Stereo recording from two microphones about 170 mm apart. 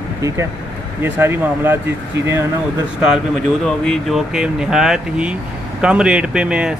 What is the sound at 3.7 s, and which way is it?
Speech, centre (ahead or behind).